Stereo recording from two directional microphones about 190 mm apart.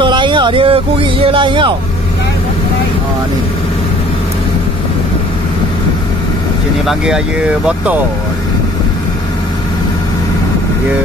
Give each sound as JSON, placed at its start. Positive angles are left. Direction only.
{"t": 0.0, "sound": "speech", "side_deg": -25}
{"t": 6.9, "sound": "speech", "side_deg": -5}